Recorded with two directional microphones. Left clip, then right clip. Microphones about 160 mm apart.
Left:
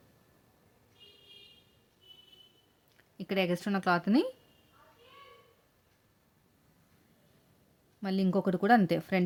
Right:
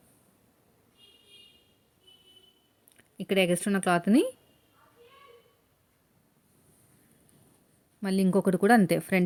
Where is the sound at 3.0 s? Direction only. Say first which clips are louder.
Right 6 dB; 20° right (ahead or behind).